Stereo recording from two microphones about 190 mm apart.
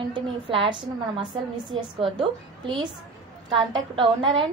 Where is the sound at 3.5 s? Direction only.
25° right (ahead or behind).